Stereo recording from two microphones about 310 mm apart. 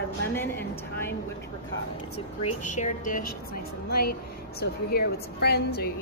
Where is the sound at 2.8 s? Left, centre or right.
Left.